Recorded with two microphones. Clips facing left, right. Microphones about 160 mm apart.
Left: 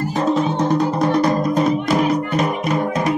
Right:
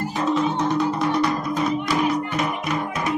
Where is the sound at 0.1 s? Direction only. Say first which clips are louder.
Left 3 dB; 40° left (ahead or behind).